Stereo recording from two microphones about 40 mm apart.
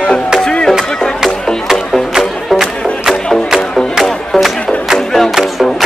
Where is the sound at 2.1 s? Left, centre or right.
Centre.